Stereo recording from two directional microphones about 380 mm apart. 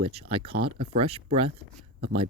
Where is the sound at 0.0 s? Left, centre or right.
Centre.